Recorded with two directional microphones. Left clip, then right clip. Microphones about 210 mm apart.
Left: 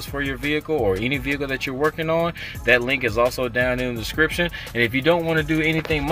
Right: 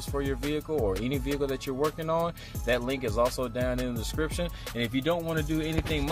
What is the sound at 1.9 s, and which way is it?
Speech, 15° right (ahead or behind).